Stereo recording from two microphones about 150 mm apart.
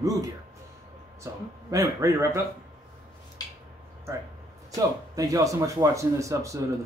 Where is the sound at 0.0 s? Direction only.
25° right (ahead or behind).